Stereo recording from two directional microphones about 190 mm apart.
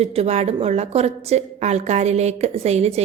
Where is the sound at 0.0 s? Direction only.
35° right (ahead or behind).